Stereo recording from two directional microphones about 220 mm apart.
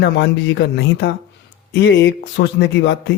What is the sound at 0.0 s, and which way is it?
A man's voice, 50° left (ahead or behind).